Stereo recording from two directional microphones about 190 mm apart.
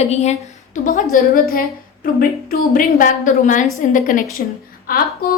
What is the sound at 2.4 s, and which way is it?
A woman's voice, 45° left (ahead or behind).